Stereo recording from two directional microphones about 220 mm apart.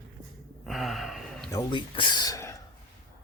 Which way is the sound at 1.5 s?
20° left (ahead or behind).